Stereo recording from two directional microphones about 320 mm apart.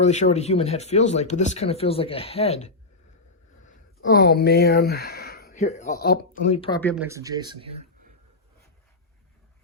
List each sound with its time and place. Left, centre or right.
0.0 s speech: left
4.0 s speech: left; by 6.9 s centre
6.9 s speech: centre